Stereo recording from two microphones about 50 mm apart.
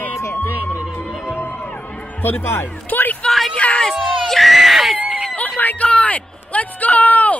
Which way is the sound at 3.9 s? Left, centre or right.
Centre.